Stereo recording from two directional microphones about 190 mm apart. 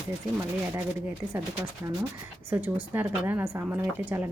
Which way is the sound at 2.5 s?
10° right (ahead or behind).